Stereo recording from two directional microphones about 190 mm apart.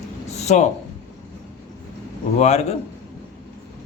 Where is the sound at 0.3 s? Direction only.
35° left (ahead or behind).